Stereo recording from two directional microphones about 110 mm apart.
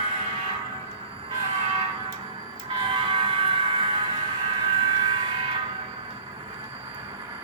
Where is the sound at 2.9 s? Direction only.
50° right (ahead or behind).